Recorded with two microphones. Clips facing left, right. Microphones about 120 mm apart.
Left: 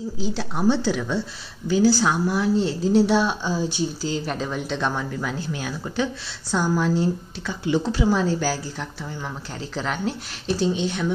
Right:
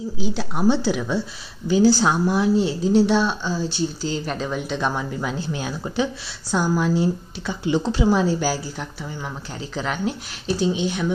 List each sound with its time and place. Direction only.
0.2 s a woman's voice: 5° right (ahead or behind)
1.7 s a woman's voice: 25° right (ahead or behind)
2.6 s speech: centre (ahead or behind)
4.1 s speech: centre (ahead or behind)
5.2 s a woman's voice: 20° right (ahead or behind)
6.5 s a woman's voice: 5° right (ahead or behind)
7.6 s a woman's voice: 20° right (ahead or behind); by 11.1 s 5° right (ahead or behind)